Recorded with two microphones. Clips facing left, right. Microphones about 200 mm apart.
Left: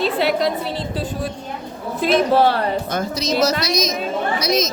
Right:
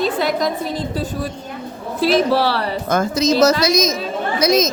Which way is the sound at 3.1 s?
45° right (ahead or behind).